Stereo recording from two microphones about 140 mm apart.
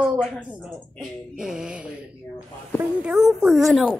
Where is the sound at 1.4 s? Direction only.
5° right (ahead or behind).